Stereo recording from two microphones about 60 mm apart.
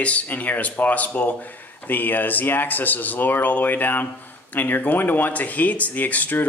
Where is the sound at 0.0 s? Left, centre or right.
Left.